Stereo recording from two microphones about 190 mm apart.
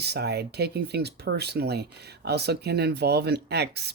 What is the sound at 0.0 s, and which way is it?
Speech, 60° right (ahead or behind).